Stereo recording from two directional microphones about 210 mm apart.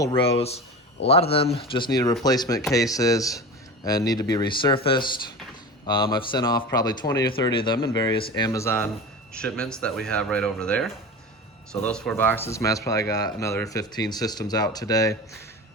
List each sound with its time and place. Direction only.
0.3 s speech: 30° left (ahead or behind)